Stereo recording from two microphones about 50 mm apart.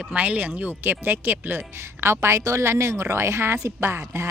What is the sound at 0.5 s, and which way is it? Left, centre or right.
A woman's voice, right.